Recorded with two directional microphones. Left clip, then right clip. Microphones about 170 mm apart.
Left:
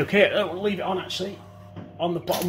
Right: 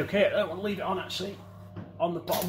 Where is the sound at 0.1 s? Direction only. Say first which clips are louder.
Left 5 dB; 50° left (ahead or behind).